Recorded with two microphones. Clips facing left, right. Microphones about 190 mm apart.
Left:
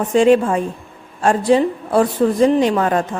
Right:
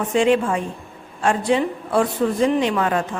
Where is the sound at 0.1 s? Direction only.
40° left (ahead or behind).